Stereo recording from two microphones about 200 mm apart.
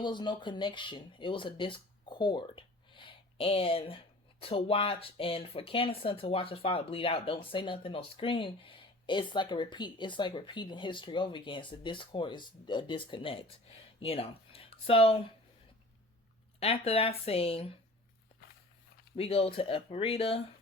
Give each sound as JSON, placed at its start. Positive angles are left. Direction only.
{"t": 0.0, "sound": "speech", "side_deg": 20}
{"t": 16.6, "sound": "speech", "side_deg": 30}
{"t": 19.1, "sound": "speech", "side_deg": 30}